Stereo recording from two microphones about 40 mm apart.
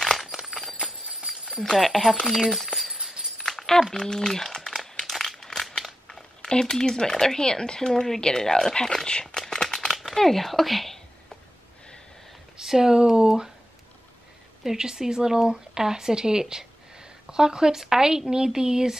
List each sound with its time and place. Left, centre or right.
0.2 s horse: centre
0.5 s horse: centre
1.2 s a sound: centre
1.7 s speech: centre
3.3 s a sound: centre
3.9 s speech: centre
4.5 s crumpling: centre
5.1 s crumpling: centre
6.0 s speech: centre
9.8 s crumpling: centre
10.1 s speech: centre
12.5 s speech: centre
14.6 s speech: centre